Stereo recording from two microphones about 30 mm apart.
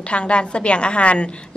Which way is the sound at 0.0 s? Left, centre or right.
Left.